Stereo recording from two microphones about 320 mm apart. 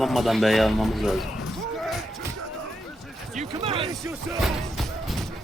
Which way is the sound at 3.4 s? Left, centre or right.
Centre.